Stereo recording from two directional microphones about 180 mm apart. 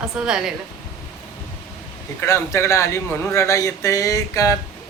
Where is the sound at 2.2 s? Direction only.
15° left (ahead or behind).